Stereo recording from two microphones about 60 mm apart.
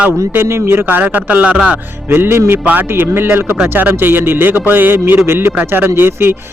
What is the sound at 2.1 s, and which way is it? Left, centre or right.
A man's voice, right.